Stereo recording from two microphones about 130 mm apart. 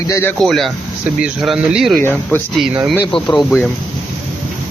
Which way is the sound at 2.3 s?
15° left (ahead or behind).